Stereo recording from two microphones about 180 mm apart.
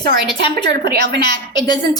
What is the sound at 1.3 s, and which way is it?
Speech, 25° left (ahead or behind).